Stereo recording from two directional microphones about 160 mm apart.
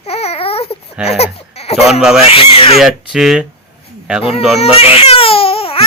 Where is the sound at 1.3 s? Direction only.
40° left (ahead or behind).